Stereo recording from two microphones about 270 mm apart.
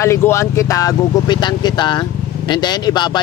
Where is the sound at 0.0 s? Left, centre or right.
Centre.